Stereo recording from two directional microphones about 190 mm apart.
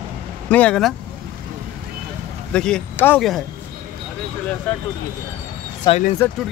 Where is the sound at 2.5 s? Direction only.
5° left (ahead or behind).